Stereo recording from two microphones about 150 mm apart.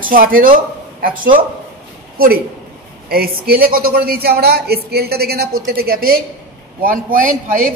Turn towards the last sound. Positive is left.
turn(degrees=-65)  # may be behind; listen again after turning